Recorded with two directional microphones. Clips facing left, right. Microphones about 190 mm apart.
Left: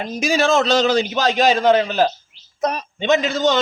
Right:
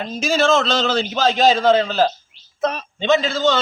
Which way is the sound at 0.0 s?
15° left (ahead or behind).